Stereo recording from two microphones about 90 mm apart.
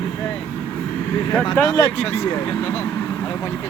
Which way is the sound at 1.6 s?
50° left (ahead or behind).